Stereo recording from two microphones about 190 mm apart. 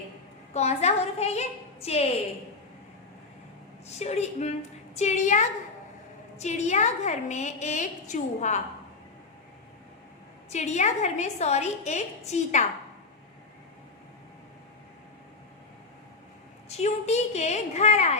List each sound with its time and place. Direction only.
0.5 s a woman's voice: 35° left (ahead or behind)
3.8 s a woman's voice: 35° left (ahead or behind)
10.5 s a woman's voice: 35° left (ahead or behind)
16.6 s a woman's voice: 35° left (ahead or behind)